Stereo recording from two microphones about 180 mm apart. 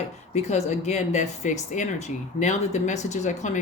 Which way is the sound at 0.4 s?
40° left (ahead or behind).